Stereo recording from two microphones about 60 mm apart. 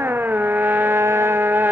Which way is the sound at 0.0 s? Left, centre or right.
Right.